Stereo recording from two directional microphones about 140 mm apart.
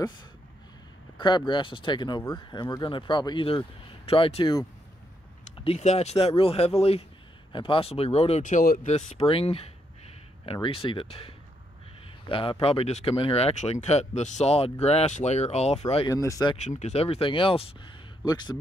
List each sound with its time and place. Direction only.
1.1 s speech: 35° left (ahead or behind)
5.6 s speech: 45° left (ahead or behind); by 8.8 s 75° left (ahead or behind)
8.8 s speech: 45° left (ahead or behind)
16.1 s speech: 25° left (ahead or behind)
16.5 s speech: 55° left (ahead or behind)
18.2 s speech: 30° left (ahead or behind)